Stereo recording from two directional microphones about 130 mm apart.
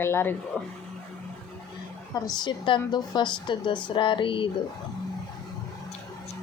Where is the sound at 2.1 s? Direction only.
30° left (ahead or behind).